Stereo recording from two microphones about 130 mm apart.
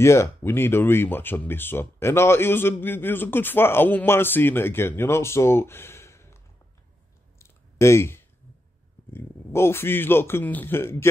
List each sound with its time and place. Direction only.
0.0 s speech: 20° left (ahead or behind)
7.3 s a sound: 20° left (ahead or behind)
9.1 s a man's voice: 20° left (ahead or behind)